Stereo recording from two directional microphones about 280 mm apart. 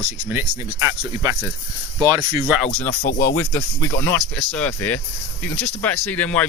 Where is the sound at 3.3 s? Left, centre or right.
Centre.